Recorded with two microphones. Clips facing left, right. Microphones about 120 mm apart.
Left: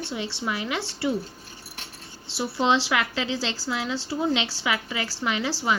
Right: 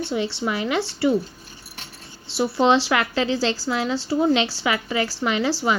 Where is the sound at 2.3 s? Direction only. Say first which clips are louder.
Right 5 dB; 50° right (ahead or behind).